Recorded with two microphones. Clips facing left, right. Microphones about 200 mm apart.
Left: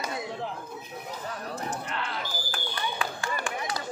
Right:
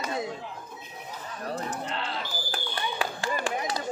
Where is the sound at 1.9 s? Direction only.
30° right (ahead or behind).